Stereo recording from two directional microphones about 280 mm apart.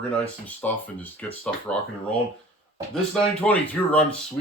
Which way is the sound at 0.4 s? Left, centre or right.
Centre.